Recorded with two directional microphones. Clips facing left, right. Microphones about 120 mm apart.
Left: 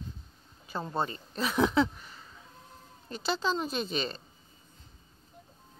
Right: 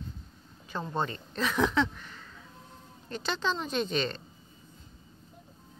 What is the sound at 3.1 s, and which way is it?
Speech, 10° left (ahead or behind).